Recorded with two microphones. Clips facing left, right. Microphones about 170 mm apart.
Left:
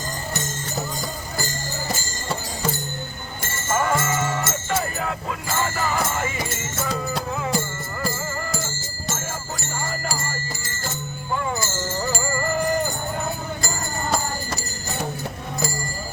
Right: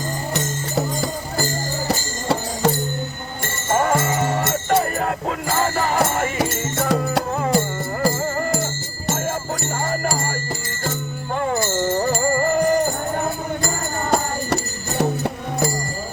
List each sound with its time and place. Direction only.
1.9 s music: 75° right (ahead or behind)
3.8 s music: 45° right (ahead or behind)
6.0 s music: 60° right (ahead or behind)
7.3 s music: 50° right (ahead or behind)
11.3 s music: 55° right (ahead or behind)
14.1 s music: 65° right (ahead or behind)